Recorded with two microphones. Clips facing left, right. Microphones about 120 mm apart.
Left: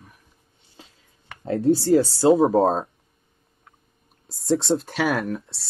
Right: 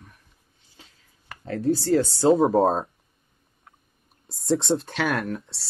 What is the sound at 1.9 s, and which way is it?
Speech, 5° left (ahead or behind).